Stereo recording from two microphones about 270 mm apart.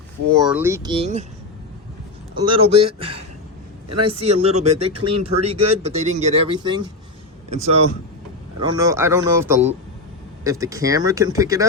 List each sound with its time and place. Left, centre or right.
0.3 s speech: centre; by 1.2 s right
2.4 s speech: centre
3.8 s a man's voice: right
4.1 s speech: right
8.6 s speech: centre